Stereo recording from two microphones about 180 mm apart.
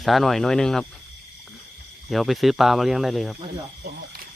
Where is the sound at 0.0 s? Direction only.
Centre (ahead or behind).